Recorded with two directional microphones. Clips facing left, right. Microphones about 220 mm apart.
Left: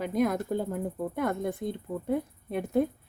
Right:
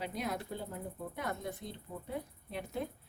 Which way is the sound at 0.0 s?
50° left (ahead or behind).